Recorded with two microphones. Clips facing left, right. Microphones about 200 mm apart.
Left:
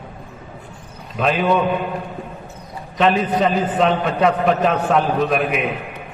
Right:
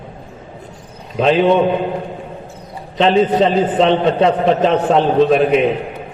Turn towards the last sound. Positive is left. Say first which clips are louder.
# right 7 dB
turn(degrees=-30)  # may be behind; listen again after turning